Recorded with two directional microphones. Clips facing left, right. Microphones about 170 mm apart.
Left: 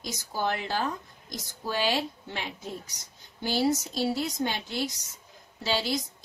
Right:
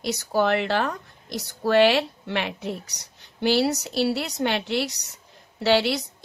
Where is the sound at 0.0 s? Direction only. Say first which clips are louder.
Right 8 dB; 70° right (ahead or behind).